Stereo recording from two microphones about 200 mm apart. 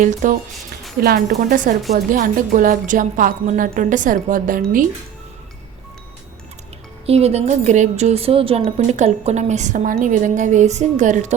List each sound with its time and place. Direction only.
0.0 s a woman's voice: 40° right (ahead or behind)
7.0 s a woman's voice: 30° right (ahead or behind)